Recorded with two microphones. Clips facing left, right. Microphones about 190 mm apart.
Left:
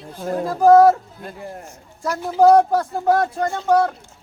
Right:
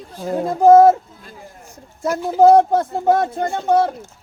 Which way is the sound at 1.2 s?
60° left (ahead or behind).